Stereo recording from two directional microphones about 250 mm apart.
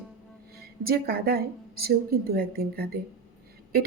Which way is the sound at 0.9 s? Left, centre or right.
Right.